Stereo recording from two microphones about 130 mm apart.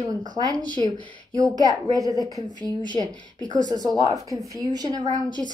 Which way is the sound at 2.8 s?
35° left (ahead or behind).